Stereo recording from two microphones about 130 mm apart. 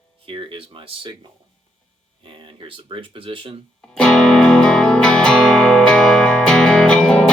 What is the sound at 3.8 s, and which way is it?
Music, 5° left (ahead or behind).